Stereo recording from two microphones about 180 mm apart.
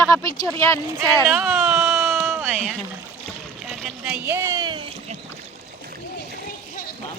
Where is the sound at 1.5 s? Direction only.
Centre (ahead or behind).